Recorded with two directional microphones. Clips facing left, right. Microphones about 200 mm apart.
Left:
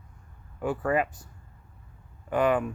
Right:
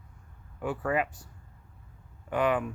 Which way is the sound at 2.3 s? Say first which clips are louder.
Left 3 dB; 45° left (ahead or behind).